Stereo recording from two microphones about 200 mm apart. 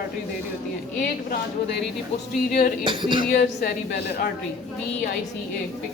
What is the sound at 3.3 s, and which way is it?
Speech, 55° left (ahead or behind).